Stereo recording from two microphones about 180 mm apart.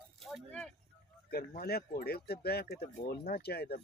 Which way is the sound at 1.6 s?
60° left (ahead or behind).